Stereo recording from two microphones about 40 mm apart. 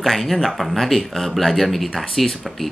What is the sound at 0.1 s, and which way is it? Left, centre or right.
Speech, centre.